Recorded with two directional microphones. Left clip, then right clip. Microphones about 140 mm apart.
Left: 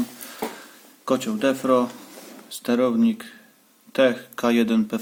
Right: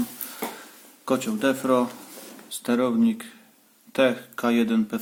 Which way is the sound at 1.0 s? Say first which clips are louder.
Left 2 dB; 15° left (ahead or behind).